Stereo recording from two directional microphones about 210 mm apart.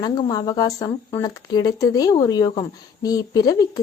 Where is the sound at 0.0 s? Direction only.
15° left (ahead or behind).